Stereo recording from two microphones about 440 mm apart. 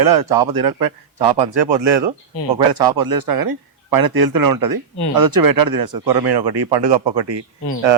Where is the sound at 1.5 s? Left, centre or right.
Right.